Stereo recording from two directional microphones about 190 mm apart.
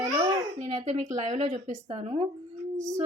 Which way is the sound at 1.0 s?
25° right (ahead or behind).